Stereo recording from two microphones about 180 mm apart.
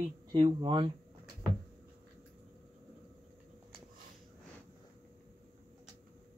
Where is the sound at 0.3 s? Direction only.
25° right (ahead or behind).